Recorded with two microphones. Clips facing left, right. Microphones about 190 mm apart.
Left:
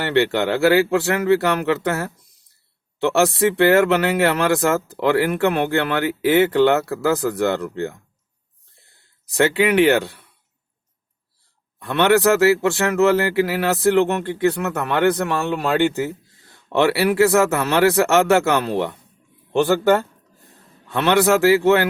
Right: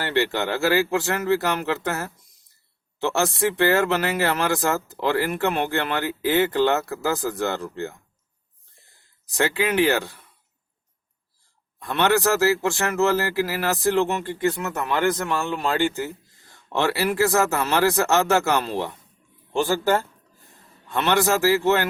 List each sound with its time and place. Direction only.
0.0 s speech: 65° left (ahead or behind)
9.3 s speech: 65° left (ahead or behind)
11.8 s speech: 60° left (ahead or behind)